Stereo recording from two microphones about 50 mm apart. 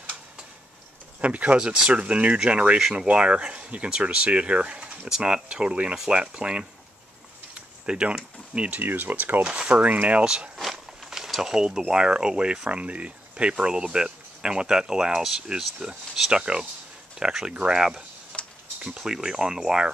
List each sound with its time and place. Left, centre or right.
1.2 s speech: right
1.6 s speech: centre
7.5 s a sound: right
8.5 s speech: right
8.8 s speech: right
9.4 s speech: right
10.2 s speech: centre
10.6 s a sound: centre
11.9 s speech: centre
18.3 s a sound: centre
18.8 s speech: centre